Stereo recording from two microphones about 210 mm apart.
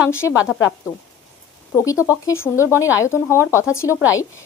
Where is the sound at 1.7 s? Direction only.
15° left (ahead or behind).